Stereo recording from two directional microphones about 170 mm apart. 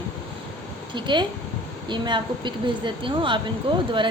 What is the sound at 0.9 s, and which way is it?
A woman's voice, 25° right (ahead or behind).